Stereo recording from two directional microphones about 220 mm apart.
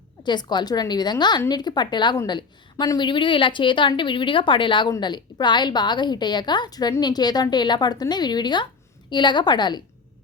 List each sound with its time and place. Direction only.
0.2 s a woman's voice: 20° left (ahead or behind)